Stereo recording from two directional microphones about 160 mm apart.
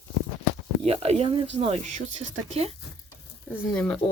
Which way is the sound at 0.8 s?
40° right (ahead or behind).